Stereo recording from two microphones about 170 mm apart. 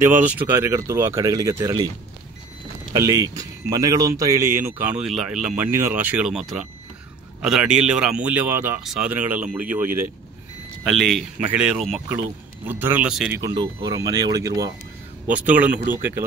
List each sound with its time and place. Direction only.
0.0 s speech: 10° right (ahead or behind)
2.9 s speech: 20° right (ahead or behind); by 5.5 s centre (ahead or behind)
5.6 s speech: 15° right (ahead or behind)
10.9 s speech: centre (ahead or behind)
13.3 s speech: 25° right (ahead or behind)
15.3 s speech: 10° right (ahead or behind)